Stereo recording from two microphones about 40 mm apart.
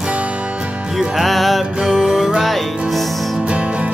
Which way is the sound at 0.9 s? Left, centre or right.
Centre.